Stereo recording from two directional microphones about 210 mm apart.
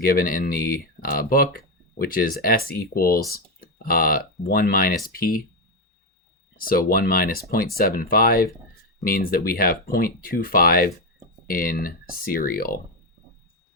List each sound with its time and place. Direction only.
0.0 s speech: 45° left (ahead or behind)
6.6 s speech: 45° left (ahead or behind)